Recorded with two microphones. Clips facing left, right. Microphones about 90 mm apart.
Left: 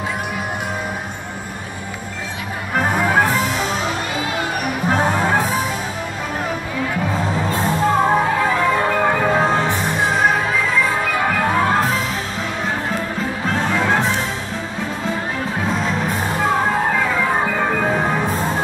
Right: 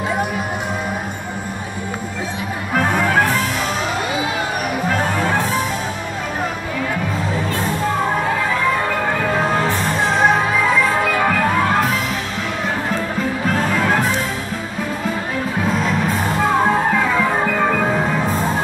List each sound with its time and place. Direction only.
2.7 s music: 10° left (ahead or behind)
4.8 s music: 20° left (ahead or behind)
9.4 s music: 15° left (ahead or behind)
10.1 s music: centre (ahead or behind)
13.5 s music: 20° left (ahead or behind)